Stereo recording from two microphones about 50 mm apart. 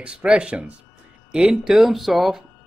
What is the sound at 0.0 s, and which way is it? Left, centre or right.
Speech, right.